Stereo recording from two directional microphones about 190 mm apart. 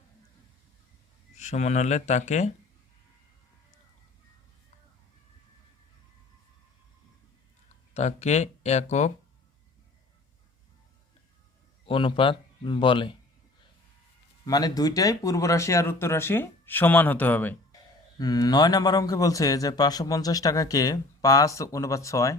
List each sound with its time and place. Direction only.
1.4 s speech: 40° left (ahead or behind)
7.9 s speech: 35° left (ahead or behind)
11.9 s a man's voice: 25° left (ahead or behind)
14.4 s speech: 20° left (ahead or behind)
18.2 s a man's voice: 20° left (ahead or behind)